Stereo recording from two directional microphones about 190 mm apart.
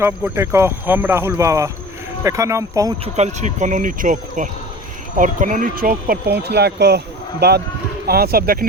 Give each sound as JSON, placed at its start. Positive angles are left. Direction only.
{"t": 0.0, "sound": "speech", "side_deg": -15}
{"t": 3.0, "sound": "speech", "side_deg": -35}